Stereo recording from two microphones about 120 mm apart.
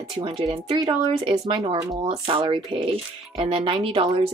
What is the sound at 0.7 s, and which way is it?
Speech, 45° right (ahead or behind).